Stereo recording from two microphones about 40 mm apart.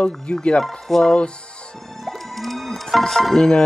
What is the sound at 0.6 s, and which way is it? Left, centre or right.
Speech, centre.